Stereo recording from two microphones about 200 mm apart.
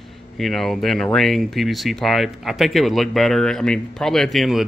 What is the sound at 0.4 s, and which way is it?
Speech, centre (ahead or behind).